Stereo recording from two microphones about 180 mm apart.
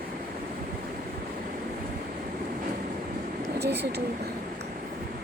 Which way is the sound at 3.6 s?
65° right (ahead or behind).